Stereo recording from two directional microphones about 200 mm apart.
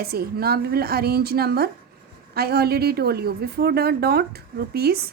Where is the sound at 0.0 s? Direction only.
50° right (ahead or behind).